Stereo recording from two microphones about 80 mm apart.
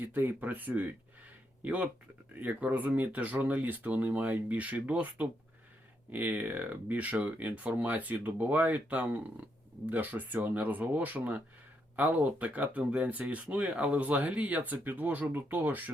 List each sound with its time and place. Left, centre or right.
0.0 s speech: right